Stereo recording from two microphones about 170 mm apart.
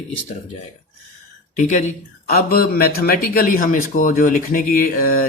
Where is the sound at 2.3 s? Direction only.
65° left (ahead or behind).